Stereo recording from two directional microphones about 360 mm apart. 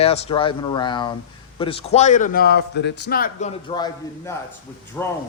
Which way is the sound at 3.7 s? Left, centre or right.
Centre.